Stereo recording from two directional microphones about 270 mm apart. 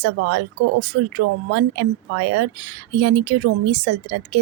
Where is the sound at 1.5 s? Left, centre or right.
Right.